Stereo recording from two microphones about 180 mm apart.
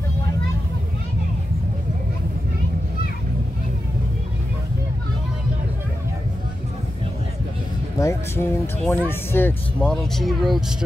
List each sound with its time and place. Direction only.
8.0 s speech: 15° left (ahead or behind); by 10.6 s centre (ahead or behind)